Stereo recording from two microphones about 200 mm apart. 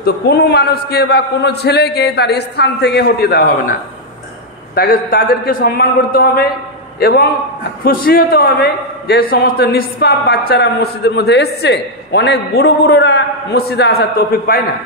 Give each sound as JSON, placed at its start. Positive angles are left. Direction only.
{"t": 0.0, "sound": "a man's voice", "side_deg": 55}
{"t": 4.7, "sound": "a man's voice", "side_deg": 45}